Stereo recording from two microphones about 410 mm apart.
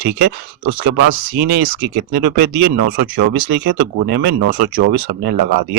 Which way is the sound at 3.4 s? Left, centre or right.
Right.